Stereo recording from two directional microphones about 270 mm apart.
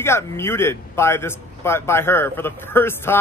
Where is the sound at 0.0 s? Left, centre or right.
Centre.